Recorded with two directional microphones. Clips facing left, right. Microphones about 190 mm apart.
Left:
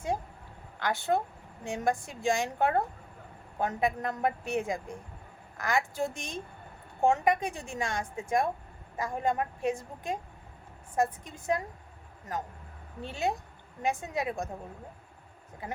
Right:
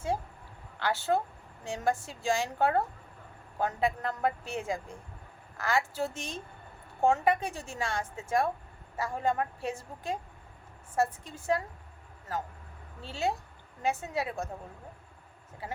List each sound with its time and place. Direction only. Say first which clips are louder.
0.8 s a woman's voice: even; 15° left (ahead or behind)
13.1 s a woman's voice: even; 15° left (ahead or behind)